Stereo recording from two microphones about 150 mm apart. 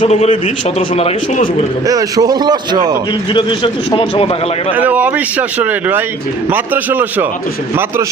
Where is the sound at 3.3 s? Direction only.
30° left (ahead or behind).